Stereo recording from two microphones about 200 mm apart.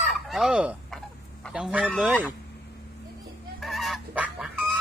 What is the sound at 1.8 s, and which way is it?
Speech, 5° right (ahead or behind).